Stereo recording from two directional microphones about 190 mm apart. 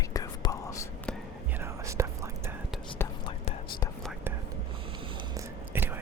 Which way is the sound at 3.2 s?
25° left (ahead or behind).